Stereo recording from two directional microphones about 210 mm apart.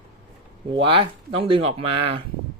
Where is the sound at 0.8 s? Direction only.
25° right (ahead or behind).